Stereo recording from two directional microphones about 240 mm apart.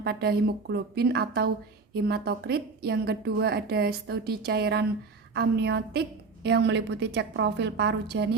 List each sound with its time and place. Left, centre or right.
0.0 s a woman's voice: right